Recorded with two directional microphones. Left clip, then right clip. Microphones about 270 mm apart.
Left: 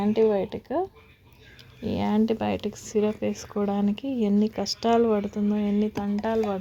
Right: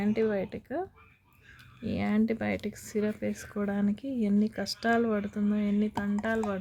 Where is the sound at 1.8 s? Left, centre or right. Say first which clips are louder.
Left 5 dB; centre.